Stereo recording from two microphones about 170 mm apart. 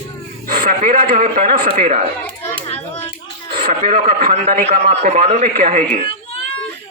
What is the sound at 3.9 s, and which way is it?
A man's voice, 50° right (ahead or behind).